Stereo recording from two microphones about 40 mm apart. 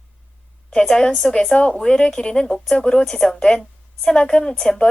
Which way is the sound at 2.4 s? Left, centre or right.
Centre.